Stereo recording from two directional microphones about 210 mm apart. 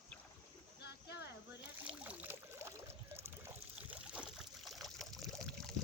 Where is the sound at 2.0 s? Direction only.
5° right (ahead or behind).